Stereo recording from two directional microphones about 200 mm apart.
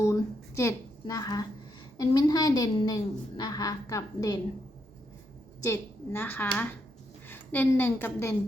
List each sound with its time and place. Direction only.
0.0 s a woman's voice: 15° left (ahead or behind)
5.6 s a woman's voice: 15° left (ahead or behind)